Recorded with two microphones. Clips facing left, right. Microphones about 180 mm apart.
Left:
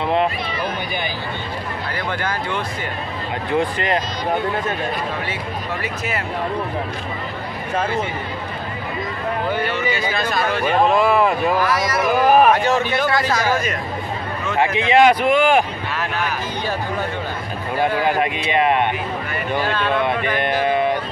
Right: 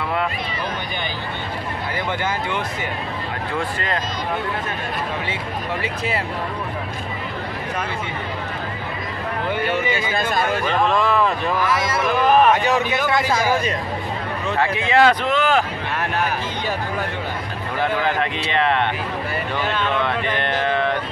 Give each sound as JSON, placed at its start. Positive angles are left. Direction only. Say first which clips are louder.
{"t": 0.0, "sound": "speech", "louder": "left 5 dB", "side_deg": 25}
{"t": 3.5, "sound": "speech", "louder": "left 6 dB", "side_deg": 20}
{"t": 10.9, "sound": "speech", "louder": "left 2 dB", "side_deg": 10}
{"t": 12.5, "sound": "a man's voice", "louder": "left 1 dB", "side_deg": -15}
{"t": 14.6, "sound": "speech", "louder": "left 3 dB", "side_deg": 20}
{"t": 17.7, "sound": "speech", "louder": "left 3 dB", "side_deg": 10}
{"t": 19.8, "sound": "a sound", "louder": "left 2 dB", "side_deg": 15}